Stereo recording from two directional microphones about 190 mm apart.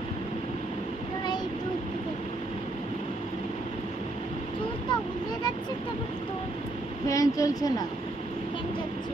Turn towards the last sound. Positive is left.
turn(degrees=20)  # may be behind; listen again after turning